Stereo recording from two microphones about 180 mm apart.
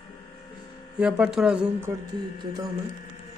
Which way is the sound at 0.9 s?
5° right (ahead or behind).